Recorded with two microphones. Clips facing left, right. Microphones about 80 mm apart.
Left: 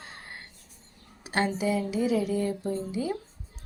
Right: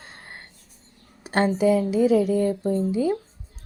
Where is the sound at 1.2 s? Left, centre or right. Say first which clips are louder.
Right 7 dB; right.